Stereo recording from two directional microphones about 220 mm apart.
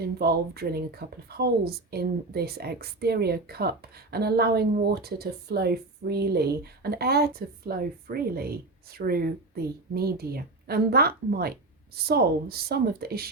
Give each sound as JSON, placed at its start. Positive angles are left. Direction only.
{"t": 0.0, "sound": "a woman's voice", "side_deg": -45}